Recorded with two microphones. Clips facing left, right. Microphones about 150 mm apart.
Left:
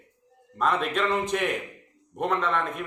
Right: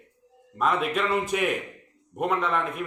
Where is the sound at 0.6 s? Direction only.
5° right (ahead or behind).